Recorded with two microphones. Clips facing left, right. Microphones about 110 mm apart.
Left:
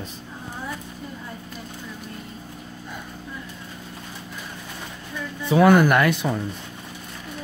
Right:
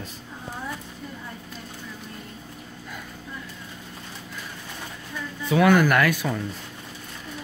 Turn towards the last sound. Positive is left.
turn(degrees=20)  # may be behind; listen again after turning